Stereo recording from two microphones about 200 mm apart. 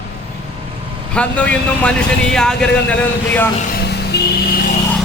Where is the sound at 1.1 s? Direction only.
5° left (ahead or behind).